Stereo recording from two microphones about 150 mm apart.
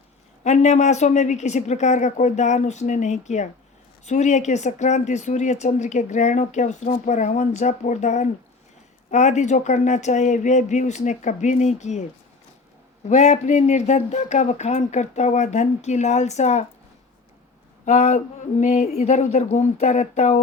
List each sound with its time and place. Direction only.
0.4 s speech: 50° left (ahead or behind)
13.1 s speech: 50° left (ahead or behind)
17.8 s speech: 50° left (ahead or behind)